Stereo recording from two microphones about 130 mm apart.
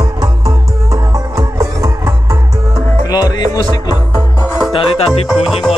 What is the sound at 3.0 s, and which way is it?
Music, 30° left (ahead or behind).